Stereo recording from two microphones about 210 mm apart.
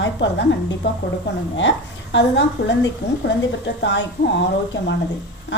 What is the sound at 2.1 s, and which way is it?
A woman's voice, 60° left (ahead or behind).